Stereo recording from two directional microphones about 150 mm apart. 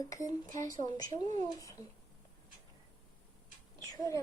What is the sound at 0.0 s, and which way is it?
Speech, 25° left (ahead or behind).